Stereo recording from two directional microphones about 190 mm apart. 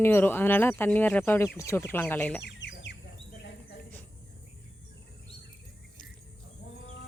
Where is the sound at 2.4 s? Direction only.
65° left (ahead or behind).